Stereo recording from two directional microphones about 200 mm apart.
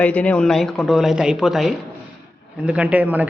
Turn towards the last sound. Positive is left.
turn(degrees=-5)  # may be behind; listen again after turning